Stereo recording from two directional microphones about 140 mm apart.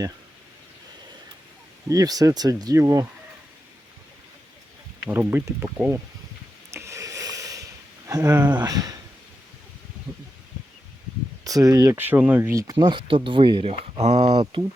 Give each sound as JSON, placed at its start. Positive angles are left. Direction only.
{"t": 1.9, "sound": "speech", "side_deg": -25}
{"t": 5.0, "sound": "speech", "side_deg": -15}
{"t": 6.7, "sound": "a sound", "side_deg": -20}
{"t": 8.6, "sound": "speech", "side_deg": -25}
{"t": 11.4, "sound": "speech", "side_deg": -25}
{"t": 11.9, "sound": "speech", "side_deg": -15}
{"t": 12.8, "sound": "speech", "side_deg": -35}
{"t": 14.0, "sound": "speech", "side_deg": -50}